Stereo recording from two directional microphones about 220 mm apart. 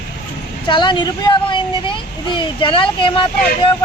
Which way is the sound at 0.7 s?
20° left (ahead or behind).